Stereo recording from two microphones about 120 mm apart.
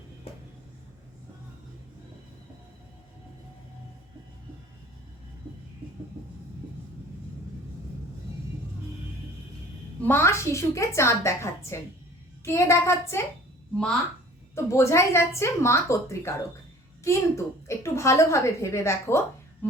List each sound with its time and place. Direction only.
10.0 s a woman's voice: 20° left (ahead or behind)
14.5 s a woman's voice: 25° left (ahead or behind)